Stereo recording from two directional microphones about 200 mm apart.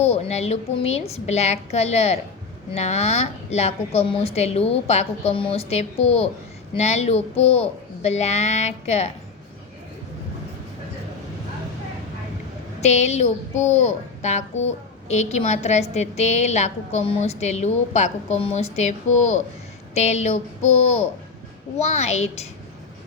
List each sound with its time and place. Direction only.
0.0 s a woman's voice: 30° left (ahead or behind)
12.8 s a woman's voice: 35° left (ahead or behind)
21.8 s a woman's voice: 35° left (ahead or behind)